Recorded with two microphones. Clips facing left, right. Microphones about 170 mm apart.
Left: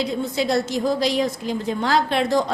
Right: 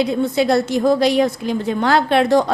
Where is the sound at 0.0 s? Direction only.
60° right (ahead or behind).